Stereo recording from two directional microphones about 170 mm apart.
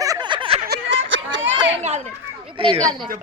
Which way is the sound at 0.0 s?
25° right (ahead or behind).